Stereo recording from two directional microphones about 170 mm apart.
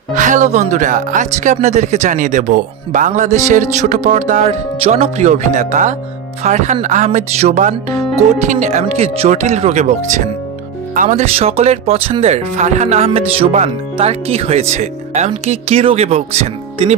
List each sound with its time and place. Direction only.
0.1 s speech: 45° right (ahead or behind)